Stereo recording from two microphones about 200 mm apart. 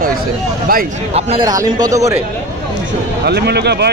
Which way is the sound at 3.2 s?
55° right (ahead or behind).